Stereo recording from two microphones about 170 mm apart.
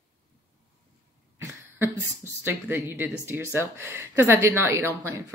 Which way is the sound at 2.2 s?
15° right (ahead or behind).